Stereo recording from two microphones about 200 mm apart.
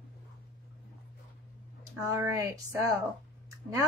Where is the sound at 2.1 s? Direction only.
15° right (ahead or behind).